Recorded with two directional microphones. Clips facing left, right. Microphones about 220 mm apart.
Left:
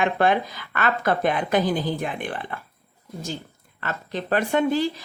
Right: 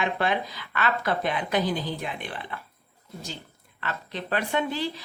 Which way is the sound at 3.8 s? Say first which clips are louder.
Left 4 dB; 45° left (ahead or behind).